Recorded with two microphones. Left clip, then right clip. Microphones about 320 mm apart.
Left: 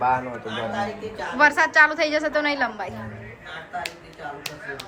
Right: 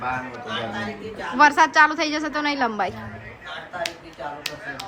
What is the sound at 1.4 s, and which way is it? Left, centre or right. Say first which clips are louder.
A woman's voice: right 1 dB; centre.